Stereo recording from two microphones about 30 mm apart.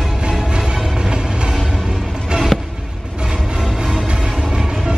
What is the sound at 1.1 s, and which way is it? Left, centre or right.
Train, right.